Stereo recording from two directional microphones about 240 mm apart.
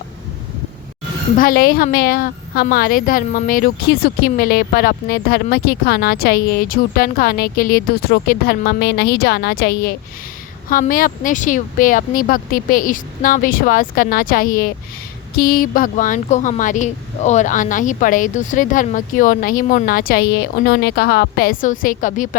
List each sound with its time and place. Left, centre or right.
1.4 s a woman's voice: left